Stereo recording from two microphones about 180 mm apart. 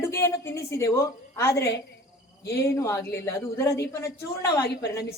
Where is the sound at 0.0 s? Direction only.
15° left (ahead or behind).